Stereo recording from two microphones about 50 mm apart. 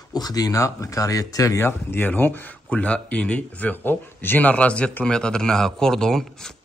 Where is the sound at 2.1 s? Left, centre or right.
Left.